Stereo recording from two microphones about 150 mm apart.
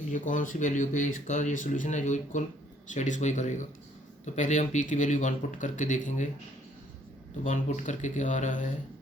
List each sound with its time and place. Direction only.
0.1 s speech: 60° left (ahead or behind)
7.4 s speech: 55° left (ahead or behind)